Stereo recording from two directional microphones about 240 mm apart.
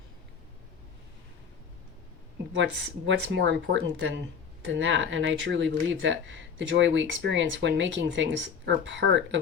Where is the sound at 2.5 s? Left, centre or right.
Right.